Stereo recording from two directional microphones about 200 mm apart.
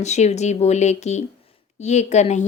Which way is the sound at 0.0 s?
35° left (ahead or behind).